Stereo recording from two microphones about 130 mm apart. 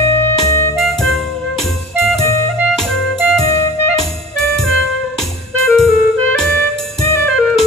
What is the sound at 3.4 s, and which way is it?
Music, 25° left (ahead or behind).